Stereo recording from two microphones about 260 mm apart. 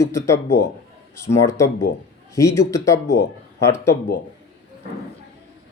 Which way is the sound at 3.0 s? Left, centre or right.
Left.